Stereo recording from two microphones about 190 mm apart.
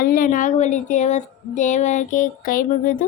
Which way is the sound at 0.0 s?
45° left (ahead or behind).